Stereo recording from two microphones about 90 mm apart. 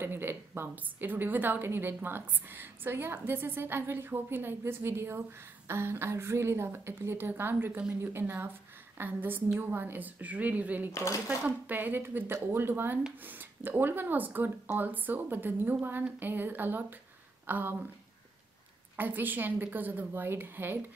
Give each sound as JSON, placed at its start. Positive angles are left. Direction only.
{"t": 0.0, "sound": "a woman's voice", "side_deg": -25}
{"t": 10.9, "sound": "speech", "side_deg": 35}
{"t": 11.2, "sound": "a woman's voice", "side_deg": -15}
{"t": 18.9, "sound": "a woman's voice", "side_deg": -20}